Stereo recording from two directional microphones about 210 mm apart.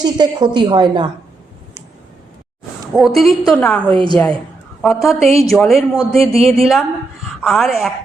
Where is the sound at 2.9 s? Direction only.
Centre (ahead or behind).